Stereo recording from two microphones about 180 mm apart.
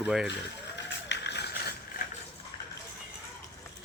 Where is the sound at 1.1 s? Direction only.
70° left (ahead or behind).